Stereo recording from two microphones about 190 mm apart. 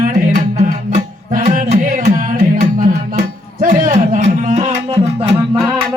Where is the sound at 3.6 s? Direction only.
45° right (ahead or behind).